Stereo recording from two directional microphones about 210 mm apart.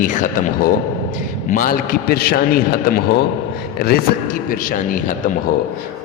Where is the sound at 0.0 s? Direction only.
40° left (ahead or behind).